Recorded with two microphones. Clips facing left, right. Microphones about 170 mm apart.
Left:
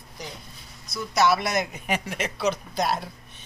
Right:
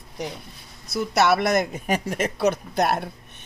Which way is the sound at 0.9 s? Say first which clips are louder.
Right 2 dB; 65° right (ahead or behind).